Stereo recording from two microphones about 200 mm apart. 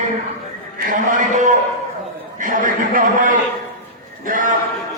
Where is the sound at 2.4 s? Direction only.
40° right (ahead or behind).